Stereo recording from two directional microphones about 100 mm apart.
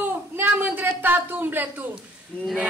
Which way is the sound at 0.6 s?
20° right (ahead or behind).